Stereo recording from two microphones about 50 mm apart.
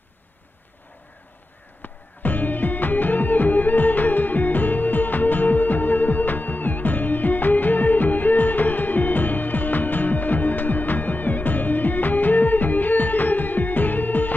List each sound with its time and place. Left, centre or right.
1.8 s music: left